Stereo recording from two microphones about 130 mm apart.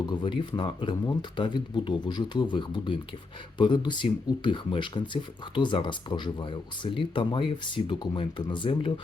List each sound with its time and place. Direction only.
0.0 s speech: 35° left (ahead or behind)